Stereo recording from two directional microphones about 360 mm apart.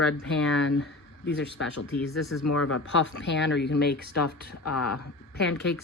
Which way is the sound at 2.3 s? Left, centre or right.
Left.